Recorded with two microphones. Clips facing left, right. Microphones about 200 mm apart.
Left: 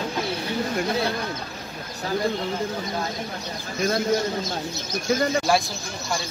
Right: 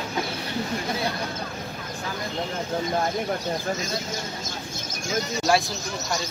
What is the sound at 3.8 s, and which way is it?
Speech, 55° left (ahead or behind).